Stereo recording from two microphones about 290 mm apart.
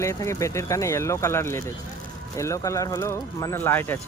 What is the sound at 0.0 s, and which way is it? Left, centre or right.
Speech, centre.